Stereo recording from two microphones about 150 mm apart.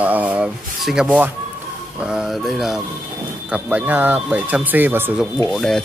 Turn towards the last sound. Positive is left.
turn(degrees=5)  # may be behind; listen again after turning